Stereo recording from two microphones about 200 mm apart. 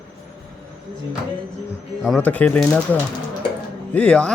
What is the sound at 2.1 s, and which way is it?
A man's voice, 10° left (ahead or behind).